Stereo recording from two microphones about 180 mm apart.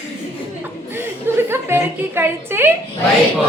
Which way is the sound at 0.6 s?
10° right (ahead or behind).